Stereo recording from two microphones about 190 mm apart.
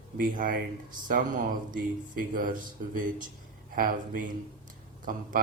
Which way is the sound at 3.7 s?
50° right (ahead or behind).